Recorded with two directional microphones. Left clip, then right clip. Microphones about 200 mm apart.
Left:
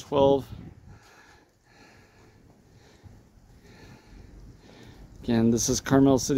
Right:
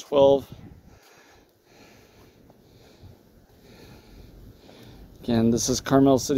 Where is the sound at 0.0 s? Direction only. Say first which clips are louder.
Right 4 dB; 5° left (ahead or behind).